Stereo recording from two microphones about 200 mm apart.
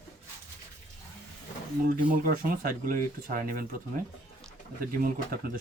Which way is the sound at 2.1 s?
45° right (ahead or behind).